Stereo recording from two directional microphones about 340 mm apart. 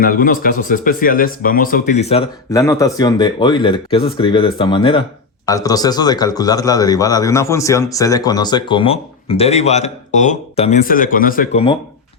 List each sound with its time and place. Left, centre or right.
0.0 s a man's voice: left